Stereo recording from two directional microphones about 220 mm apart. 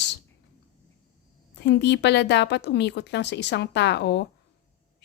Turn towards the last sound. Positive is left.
turn(degrees=50)  # may be behind; listen again after turning